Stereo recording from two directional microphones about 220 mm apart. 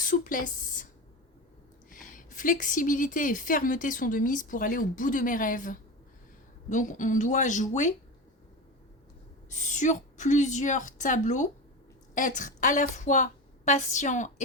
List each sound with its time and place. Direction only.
0.0 s a woman's voice: 40° left (ahead or behind)
1.9 s a woman's voice: 35° left (ahead or behind)
9.5 s a woman's voice: 35° left (ahead or behind)